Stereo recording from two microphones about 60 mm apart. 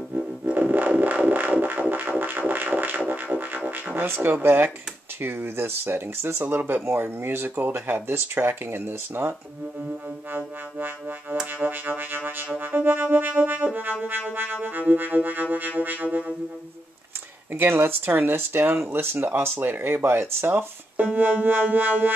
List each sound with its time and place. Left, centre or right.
0.6 s music: right
5.2 s speech: right
10.3 s speech: right
12.4 s music: right
14.3 s speech: right
15.8 s music: right
17.5 s speech: right